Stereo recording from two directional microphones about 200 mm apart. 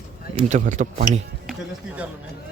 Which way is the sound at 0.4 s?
35° right (ahead or behind).